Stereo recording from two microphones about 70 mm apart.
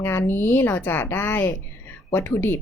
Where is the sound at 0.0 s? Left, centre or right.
Left.